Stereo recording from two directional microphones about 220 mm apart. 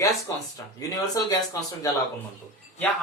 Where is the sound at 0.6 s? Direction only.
10° left (ahead or behind).